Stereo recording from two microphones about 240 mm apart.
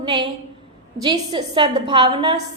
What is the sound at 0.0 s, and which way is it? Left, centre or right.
A woman's voice, centre.